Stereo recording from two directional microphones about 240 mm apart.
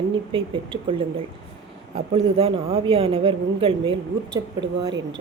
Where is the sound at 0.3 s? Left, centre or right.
Right.